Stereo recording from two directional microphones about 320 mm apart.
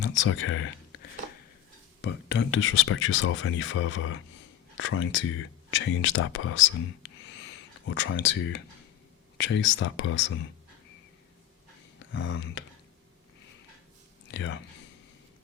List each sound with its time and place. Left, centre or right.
0.0 s speech: left
7.3 s a sound: left
9.4 s speech: left
12.1 s speech: left
14.3 s speech: left